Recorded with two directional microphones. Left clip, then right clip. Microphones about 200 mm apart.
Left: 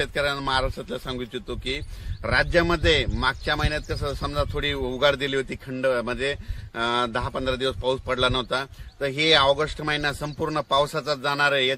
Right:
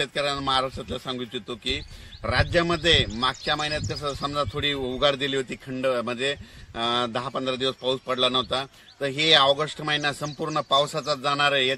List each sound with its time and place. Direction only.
0.0 s speech: 5° left (ahead or behind)